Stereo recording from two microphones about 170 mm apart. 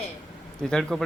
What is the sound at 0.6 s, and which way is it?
Speech, 5° left (ahead or behind).